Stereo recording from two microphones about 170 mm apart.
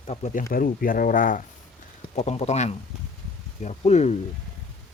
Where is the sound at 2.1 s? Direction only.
40° left (ahead or behind).